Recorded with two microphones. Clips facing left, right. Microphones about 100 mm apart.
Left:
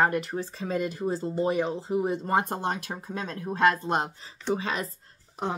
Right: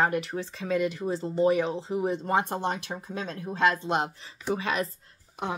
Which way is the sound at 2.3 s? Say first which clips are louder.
Even; 40° left (ahead or behind).